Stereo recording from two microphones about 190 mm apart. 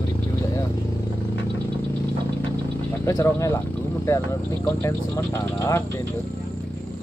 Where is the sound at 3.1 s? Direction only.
15° left (ahead or behind).